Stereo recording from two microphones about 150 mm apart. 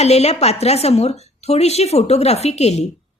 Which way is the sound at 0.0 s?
45° left (ahead or behind).